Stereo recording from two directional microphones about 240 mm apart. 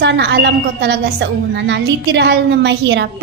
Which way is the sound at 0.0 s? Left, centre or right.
Right.